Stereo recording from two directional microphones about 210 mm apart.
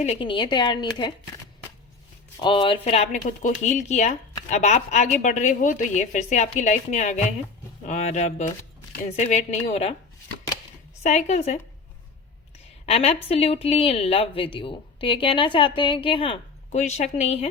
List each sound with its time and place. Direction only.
0.0 s speech: 30° left (ahead or behind)
2.4 s a woman's voice: 25° left (ahead or behind)
11.0 s a woman's voice: 30° left (ahead or behind)
12.8 s speech: 30° left (ahead or behind)